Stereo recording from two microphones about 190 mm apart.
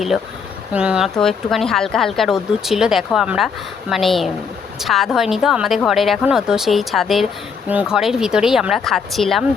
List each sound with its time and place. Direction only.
0.7 s speech: 5° right (ahead or behind)